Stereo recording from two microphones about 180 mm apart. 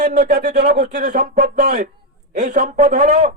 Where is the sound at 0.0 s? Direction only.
40° right (ahead or behind).